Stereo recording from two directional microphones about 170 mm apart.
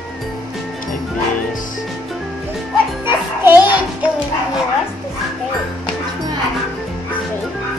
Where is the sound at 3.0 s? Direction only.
15° right (ahead or behind).